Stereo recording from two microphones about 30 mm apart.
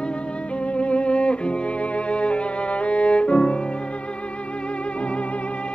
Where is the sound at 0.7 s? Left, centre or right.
Left.